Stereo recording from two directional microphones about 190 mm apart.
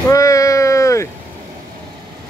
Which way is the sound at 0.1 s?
15° left (ahead or behind).